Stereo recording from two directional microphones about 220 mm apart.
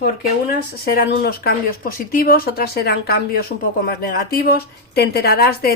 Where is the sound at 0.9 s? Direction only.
45° left (ahead or behind).